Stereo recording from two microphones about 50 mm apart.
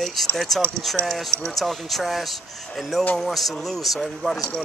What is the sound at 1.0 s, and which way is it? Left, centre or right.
Speech, right.